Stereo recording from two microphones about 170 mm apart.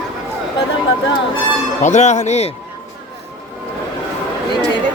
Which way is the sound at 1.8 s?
45° left (ahead or behind).